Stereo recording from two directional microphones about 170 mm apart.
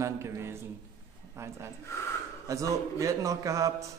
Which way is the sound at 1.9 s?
15° left (ahead or behind).